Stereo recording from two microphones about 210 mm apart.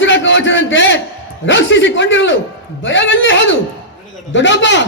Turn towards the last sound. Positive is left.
turn(degrees=60)  # may be behind; listen again after turning